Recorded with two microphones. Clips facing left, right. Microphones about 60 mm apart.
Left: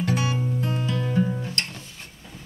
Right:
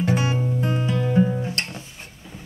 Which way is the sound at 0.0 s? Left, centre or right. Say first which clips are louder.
Right 3 dB; right.